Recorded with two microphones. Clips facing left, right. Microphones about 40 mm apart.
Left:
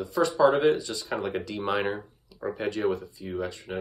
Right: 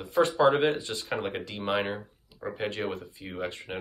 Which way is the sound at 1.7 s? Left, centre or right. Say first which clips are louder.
Even; centre.